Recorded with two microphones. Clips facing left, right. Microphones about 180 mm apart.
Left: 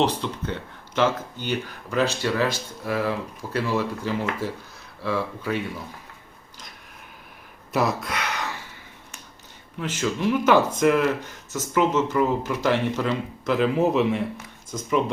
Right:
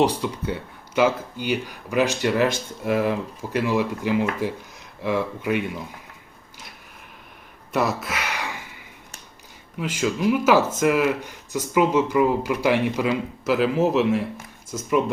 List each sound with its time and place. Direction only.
0.0 s speech: 10° right (ahead or behind)
7.7 s gasp: centre (ahead or behind)
9.8 s speech: 10° right (ahead or behind)